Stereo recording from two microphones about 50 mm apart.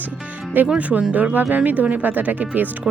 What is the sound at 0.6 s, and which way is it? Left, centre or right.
Speech, right.